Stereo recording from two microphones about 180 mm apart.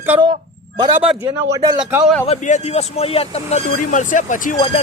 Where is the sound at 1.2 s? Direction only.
20° right (ahead or behind).